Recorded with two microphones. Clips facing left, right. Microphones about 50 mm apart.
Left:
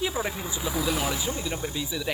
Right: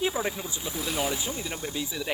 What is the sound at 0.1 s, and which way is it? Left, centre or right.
Speech, centre.